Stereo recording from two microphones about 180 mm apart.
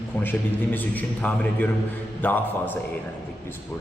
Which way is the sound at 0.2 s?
10° left (ahead or behind).